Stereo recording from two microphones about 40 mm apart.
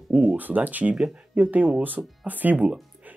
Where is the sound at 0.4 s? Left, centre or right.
Right.